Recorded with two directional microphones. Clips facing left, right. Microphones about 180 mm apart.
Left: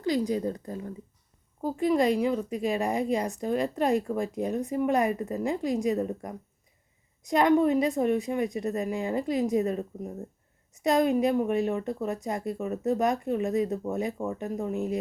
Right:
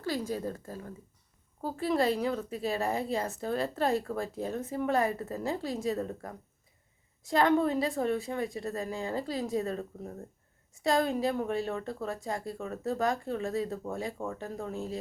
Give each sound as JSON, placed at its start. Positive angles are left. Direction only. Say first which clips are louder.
{"t": 0.0, "sound": "a woman's voice", "louder": "left 6 dB", "side_deg": 15}